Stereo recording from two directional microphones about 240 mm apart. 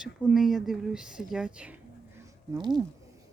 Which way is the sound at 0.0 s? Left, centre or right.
Centre.